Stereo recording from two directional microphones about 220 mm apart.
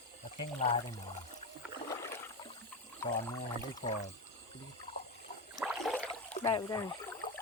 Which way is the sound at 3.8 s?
35° left (ahead or behind).